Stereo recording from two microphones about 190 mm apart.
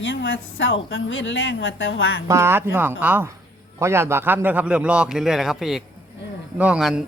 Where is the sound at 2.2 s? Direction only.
15° right (ahead or behind).